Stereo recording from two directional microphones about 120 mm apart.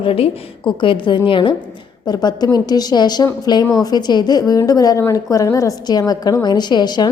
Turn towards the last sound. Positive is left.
turn(degrees=35)  # may be behind; listen again after turning